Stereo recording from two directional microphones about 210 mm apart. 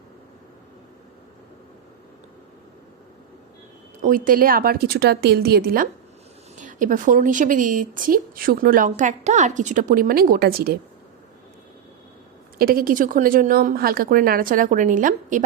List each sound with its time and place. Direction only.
4.0 s a woman's voice: 40° right (ahead or behind)
12.5 s a woman's voice: 45° right (ahead or behind)